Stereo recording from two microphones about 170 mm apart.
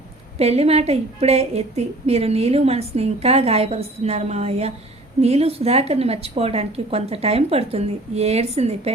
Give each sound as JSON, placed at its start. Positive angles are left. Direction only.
{"t": 0.3, "sound": "a woman's voice", "side_deg": -40}